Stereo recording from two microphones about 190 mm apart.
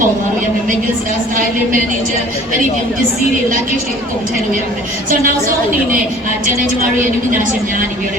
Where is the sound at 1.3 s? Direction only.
45° right (ahead or behind).